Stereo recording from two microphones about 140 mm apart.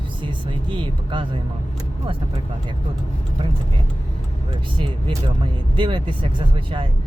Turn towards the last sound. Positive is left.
turn(degrees=-35)  # may be behind; listen again after turning